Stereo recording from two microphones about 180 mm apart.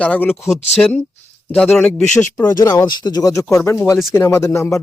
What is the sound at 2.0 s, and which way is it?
Speech, 45° left (ahead or behind).